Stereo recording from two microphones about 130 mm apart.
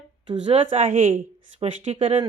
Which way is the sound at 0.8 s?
80° right.